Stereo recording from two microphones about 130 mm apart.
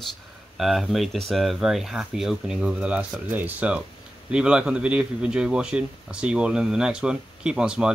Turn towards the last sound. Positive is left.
turn(degrees=-5)  # may be behind; listen again after turning